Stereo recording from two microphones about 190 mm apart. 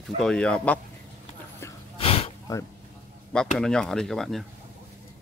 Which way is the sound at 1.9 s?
30° left (ahead or behind).